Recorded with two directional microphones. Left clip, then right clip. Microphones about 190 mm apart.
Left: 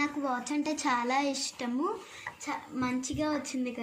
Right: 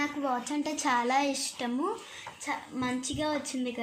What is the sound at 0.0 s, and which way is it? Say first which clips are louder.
A woman's voice: right 1 dB; 20° right (ahead or behind).